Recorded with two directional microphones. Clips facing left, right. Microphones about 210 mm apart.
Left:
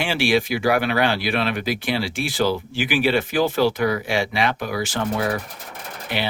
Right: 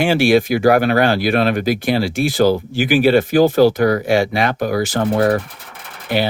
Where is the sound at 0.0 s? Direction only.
45° right (ahead or behind).